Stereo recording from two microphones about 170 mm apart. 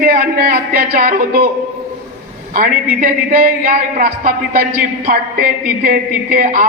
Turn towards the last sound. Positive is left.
turn(degrees=-55)  # may be behind; listen again after turning